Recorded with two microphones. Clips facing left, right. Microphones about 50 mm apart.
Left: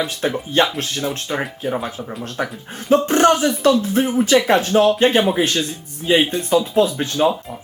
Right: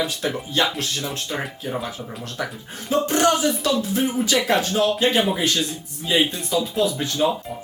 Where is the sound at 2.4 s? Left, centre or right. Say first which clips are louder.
Left 3 dB; left.